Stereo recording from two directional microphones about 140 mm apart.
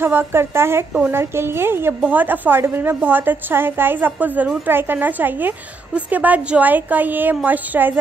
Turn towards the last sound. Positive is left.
turn(degrees=-10)  # may be behind; listen again after turning